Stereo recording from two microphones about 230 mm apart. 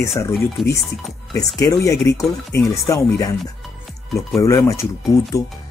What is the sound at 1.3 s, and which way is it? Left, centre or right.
Speech, centre.